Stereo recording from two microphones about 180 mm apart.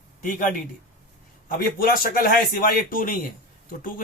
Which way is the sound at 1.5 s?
55° left (ahead or behind).